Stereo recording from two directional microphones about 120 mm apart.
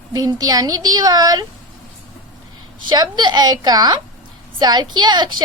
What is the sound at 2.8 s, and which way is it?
A child's voice, 35° right (ahead or behind).